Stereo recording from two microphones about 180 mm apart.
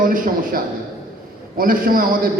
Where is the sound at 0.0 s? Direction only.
50° right (ahead or behind).